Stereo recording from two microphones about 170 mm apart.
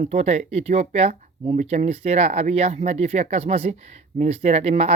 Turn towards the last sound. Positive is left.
turn(degrees=-40)  # may be behind; listen again after turning